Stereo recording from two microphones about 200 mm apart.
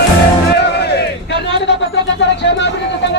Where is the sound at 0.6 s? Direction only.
55° left (ahead or behind).